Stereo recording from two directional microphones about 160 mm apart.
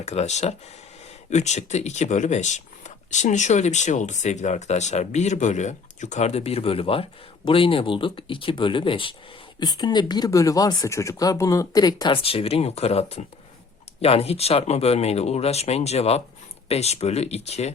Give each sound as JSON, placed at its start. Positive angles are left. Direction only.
{"t": 0.0, "sound": "speech", "side_deg": 45}